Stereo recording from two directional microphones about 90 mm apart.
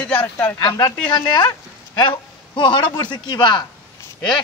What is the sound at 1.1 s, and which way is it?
A man's voice, 55° left (ahead or behind).